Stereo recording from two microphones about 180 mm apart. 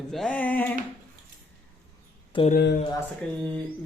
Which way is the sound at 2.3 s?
30° left (ahead or behind).